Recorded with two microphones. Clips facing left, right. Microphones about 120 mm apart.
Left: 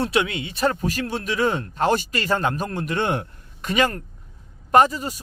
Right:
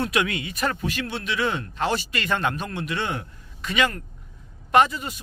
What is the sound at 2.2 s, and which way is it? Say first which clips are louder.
Speech: left 3 dB; 35° left (ahead or behind).